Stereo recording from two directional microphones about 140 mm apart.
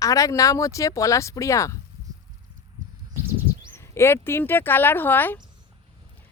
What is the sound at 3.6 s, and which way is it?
Speech, 20° left (ahead or behind).